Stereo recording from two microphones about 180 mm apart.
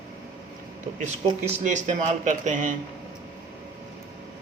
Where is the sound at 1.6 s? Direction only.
40° right (ahead or behind).